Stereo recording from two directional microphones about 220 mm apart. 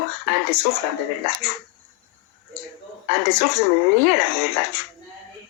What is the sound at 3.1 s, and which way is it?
Speech, 30° right (ahead or behind).